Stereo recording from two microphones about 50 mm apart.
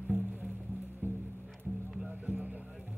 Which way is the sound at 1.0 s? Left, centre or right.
Right.